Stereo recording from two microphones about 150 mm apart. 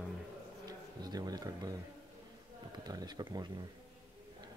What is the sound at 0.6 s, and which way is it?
Speech, 25° right (ahead or behind).